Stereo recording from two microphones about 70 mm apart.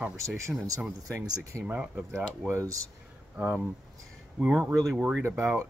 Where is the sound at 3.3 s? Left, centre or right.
Centre.